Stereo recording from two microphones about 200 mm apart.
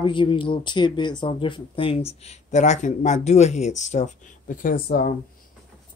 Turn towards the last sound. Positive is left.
turn(degrees=50)  # may be behind; listen again after turning